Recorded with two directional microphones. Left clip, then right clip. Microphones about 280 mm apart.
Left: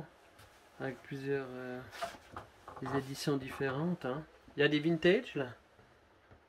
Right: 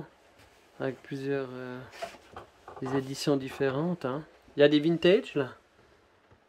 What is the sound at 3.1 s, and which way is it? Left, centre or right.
Speech, centre.